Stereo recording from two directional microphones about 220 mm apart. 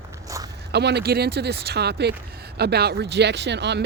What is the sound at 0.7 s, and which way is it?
Speech, 50° right (ahead or behind).